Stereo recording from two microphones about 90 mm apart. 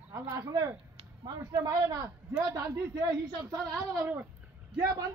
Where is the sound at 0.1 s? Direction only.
40° right (ahead or behind).